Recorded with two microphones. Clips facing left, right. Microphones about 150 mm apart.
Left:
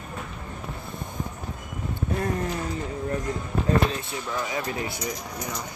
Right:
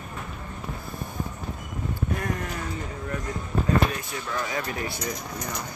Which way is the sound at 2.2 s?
30° left (ahead or behind).